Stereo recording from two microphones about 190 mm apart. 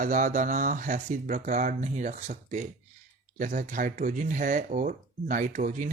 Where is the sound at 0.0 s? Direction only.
45° right (ahead or behind).